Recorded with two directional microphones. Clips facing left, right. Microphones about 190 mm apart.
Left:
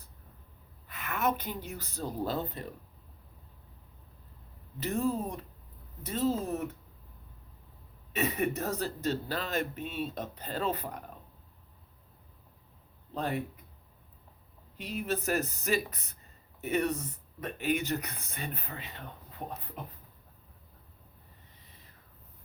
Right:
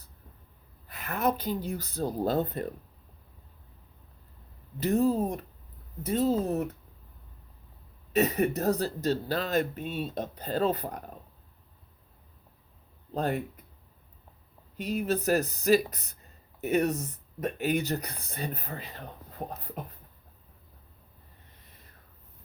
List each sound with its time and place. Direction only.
0.9 s speech: 35° right (ahead or behind)
4.9 s speech: 40° right (ahead or behind)
8.1 s speech: 40° right (ahead or behind)
13.1 s speech: 45° right (ahead or behind)
14.8 s speech: 40° right (ahead or behind)